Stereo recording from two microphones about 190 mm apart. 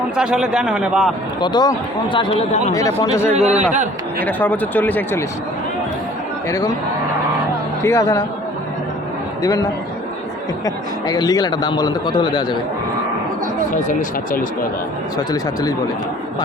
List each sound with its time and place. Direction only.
0.2 s a man's voice: 5° right (ahead or behind)
1.4 s a man's voice: 20° left (ahead or behind)
2.7 s speech: 20° left (ahead or behind)
3.3 s a man's voice: 35° right (ahead or behind)
4.2 s speech: 10° left (ahead or behind)
7.9 s speech: 15° left (ahead or behind)
11.0 s a man's voice: 20° left (ahead or behind)